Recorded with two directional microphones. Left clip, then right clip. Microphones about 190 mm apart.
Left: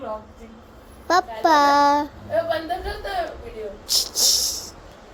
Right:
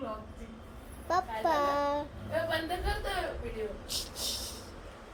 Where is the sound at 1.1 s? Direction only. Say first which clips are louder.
Left 12 dB; 30° left (ahead or behind).